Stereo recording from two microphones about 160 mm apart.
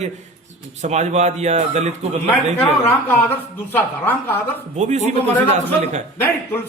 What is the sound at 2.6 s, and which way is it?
A woman's voice, 10° left (ahead or behind).